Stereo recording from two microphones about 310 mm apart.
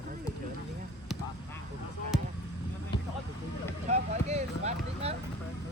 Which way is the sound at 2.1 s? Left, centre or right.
Centre.